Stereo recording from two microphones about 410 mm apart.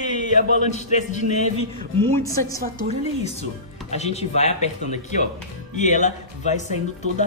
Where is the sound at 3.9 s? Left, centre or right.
Centre.